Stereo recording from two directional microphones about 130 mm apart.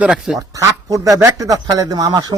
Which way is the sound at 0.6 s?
25° right (ahead or behind).